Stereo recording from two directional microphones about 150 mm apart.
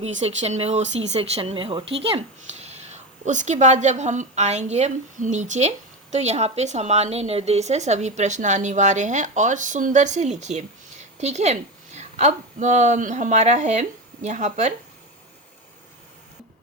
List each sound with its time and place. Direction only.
0.0 s speech: 45° right (ahead or behind)